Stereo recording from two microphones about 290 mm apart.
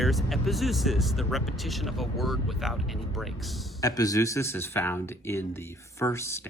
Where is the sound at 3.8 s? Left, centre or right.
Centre.